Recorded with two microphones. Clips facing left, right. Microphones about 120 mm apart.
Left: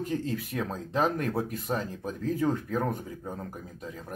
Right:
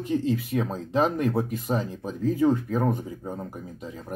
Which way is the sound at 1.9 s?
15° right (ahead or behind).